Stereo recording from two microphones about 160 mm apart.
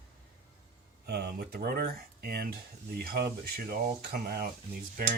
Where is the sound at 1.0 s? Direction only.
85° right.